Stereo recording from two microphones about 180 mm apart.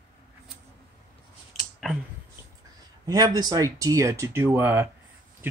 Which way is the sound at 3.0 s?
20° right (ahead or behind).